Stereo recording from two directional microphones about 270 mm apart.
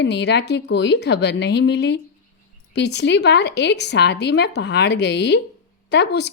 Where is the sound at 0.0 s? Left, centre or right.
Left.